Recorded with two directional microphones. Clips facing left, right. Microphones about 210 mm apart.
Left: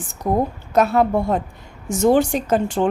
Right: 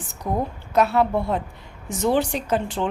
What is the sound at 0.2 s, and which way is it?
A woman's voice, 45° left (ahead or behind).